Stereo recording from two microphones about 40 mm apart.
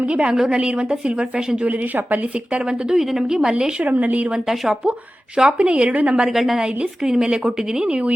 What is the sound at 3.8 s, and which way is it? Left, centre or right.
Speech, right.